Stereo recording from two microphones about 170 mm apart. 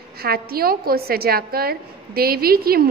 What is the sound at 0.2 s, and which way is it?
A woman's voice, 65° right (ahead or behind).